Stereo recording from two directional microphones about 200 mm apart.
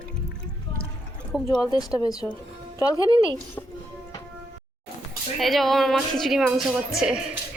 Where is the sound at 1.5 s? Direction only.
20° left (ahead or behind).